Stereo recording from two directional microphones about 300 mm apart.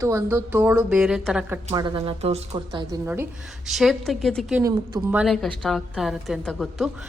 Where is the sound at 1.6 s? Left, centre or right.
Centre.